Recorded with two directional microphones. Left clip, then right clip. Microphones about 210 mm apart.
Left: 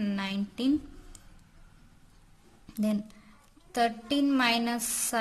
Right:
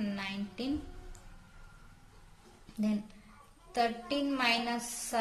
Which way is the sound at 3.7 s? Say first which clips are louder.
Left 4 dB; 45° left (ahead or behind).